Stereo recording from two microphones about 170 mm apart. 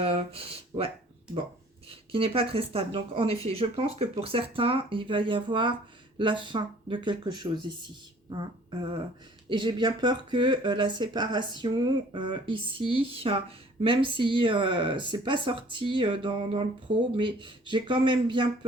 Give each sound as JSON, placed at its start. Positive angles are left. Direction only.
{"t": 0.0, "sound": "speech", "side_deg": -35}
{"t": 2.1, "sound": "speech", "side_deg": -35}